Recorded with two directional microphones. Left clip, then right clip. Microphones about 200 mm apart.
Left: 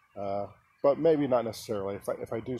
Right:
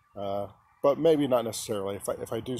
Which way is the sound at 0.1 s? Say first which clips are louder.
Right 1 dB; 10° right (ahead or behind).